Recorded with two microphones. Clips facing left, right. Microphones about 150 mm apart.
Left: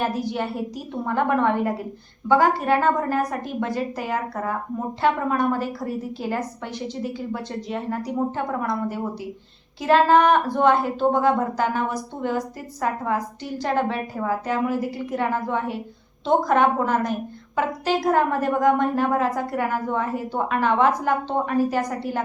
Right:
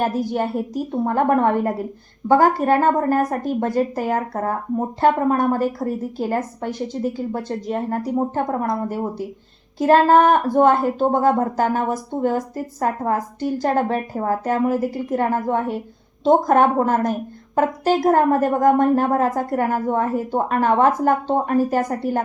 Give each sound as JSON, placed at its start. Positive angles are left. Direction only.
{"t": 0.0, "sound": "a woman's voice", "side_deg": -45}